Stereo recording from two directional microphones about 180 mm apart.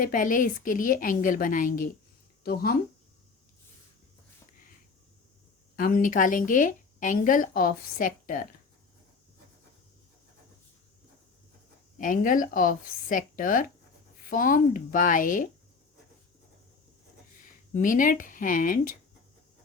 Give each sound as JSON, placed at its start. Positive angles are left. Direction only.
{"t": 0.0, "sound": "speech", "side_deg": 50}
{"t": 5.7, "sound": "speech", "side_deg": 50}
{"t": 11.9, "sound": "speech", "side_deg": 50}
{"t": 17.4, "sound": "speech", "side_deg": 45}